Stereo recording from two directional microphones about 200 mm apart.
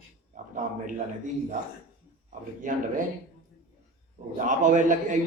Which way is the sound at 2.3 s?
40° right (ahead or behind).